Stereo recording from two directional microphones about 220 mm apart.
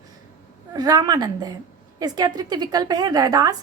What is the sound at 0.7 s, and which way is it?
A woman's voice, 15° right (ahead or behind).